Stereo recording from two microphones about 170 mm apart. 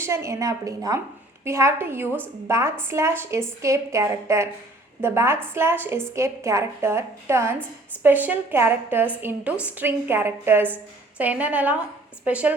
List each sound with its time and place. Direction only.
0.0 s a woman's voice: 15° right (ahead or behind)